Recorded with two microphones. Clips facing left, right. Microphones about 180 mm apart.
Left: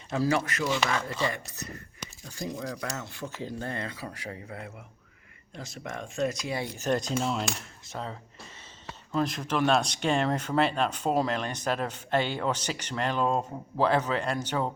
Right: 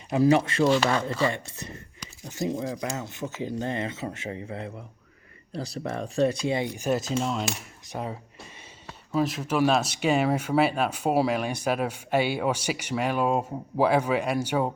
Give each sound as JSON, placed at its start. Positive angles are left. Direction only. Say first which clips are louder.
{"t": 0.1, "sound": "speech", "louder": "right 6 dB", "side_deg": -20}
{"t": 6.6, "sound": "speech", "louder": "right 2 dB", "side_deg": -10}
{"t": 7.9, "sound": "speech", "louder": "right 4 dB", "side_deg": -15}